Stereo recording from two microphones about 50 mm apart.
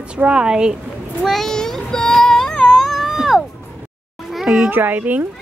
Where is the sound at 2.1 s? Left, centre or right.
Centre.